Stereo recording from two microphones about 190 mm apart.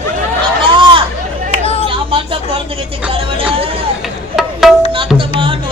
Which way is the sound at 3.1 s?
30° right (ahead or behind).